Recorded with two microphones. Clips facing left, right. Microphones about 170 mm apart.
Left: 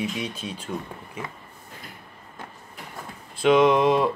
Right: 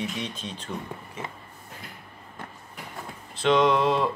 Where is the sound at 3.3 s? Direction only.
10° left (ahead or behind).